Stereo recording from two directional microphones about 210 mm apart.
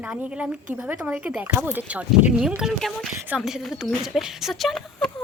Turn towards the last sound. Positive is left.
turn(degrees=0)  # may be behind; listen again after turning